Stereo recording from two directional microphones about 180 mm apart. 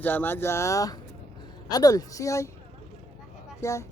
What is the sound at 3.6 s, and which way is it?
Speech, 15° left (ahead or behind).